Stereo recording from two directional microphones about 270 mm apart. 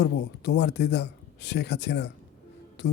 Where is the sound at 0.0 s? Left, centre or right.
Left.